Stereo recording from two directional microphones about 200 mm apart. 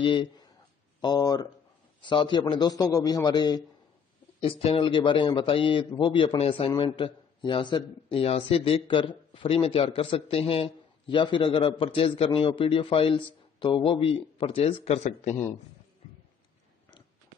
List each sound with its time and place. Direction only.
0.0 s speech: 25° left (ahead or behind)